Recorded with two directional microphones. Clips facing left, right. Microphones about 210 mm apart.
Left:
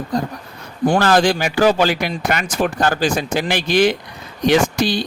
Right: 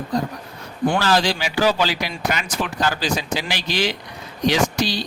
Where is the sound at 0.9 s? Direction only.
50° left (ahead or behind).